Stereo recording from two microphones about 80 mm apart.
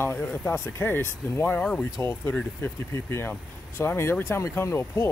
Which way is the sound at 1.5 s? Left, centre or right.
Centre.